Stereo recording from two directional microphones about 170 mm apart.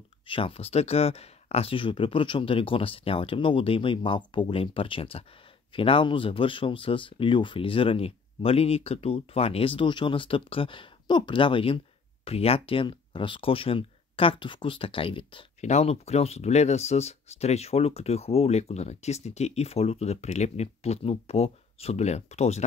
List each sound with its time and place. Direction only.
0.3 s speech: 35° left (ahead or behind)